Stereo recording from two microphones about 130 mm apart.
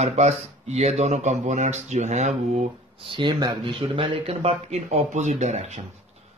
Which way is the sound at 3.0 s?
40° right (ahead or behind).